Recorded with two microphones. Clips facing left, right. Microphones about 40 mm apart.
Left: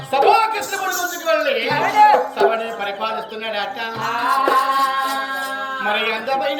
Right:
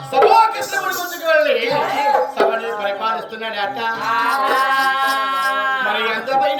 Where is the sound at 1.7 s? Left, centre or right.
Left.